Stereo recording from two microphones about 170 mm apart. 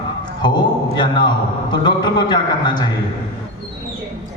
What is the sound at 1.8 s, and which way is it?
A man's voice, 25° left (ahead or behind).